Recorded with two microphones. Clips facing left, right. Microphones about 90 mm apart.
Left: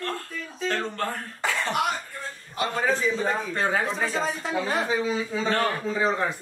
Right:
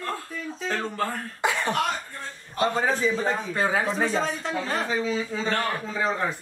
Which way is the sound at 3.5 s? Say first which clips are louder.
Right 1 dB; 5° right (ahead or behind).